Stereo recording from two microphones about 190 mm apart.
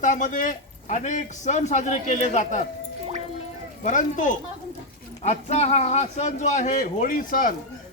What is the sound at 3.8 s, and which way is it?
A man's voice, 40° left (ahead or behind).